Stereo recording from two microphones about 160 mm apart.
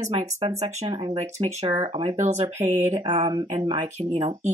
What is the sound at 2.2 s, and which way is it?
Speech, 45° right (ahead or behind).